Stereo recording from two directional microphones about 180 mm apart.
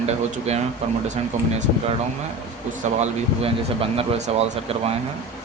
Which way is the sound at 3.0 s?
35° right (ahead or behind).